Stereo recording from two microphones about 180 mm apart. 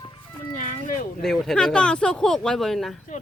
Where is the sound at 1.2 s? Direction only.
5° left (ahead or behind).